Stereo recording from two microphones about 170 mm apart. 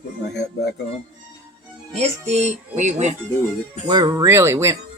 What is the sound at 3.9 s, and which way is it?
Speech, 25° right (ahead or behind).